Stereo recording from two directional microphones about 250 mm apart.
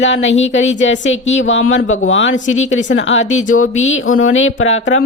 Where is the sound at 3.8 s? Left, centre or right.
Left.